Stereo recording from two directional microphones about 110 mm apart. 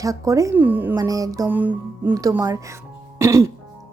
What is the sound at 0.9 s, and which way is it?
Speech, 35° right (ahead or behind).